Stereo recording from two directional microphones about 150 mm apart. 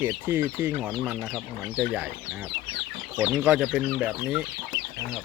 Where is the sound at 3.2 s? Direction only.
10° right (ahead or behind).